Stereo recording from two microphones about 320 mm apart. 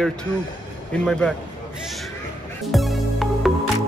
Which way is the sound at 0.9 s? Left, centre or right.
Centre.